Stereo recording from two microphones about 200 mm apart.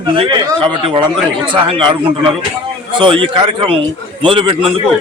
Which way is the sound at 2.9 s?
25° right (ahead or behind).